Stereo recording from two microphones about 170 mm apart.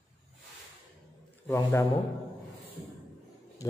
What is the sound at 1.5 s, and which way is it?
Speech, 15° left (ahead or behind).